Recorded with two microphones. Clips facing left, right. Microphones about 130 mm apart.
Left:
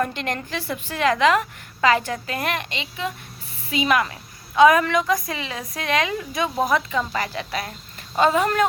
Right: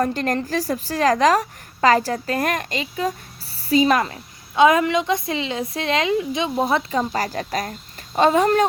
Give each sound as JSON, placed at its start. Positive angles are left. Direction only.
{"t": 0.0, "sound": "a woman's voice", "side_deg": -40}